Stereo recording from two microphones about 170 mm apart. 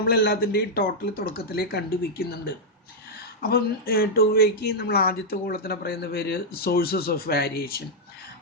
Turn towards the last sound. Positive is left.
turn(degrees=65)  # may be behind; listen again after turning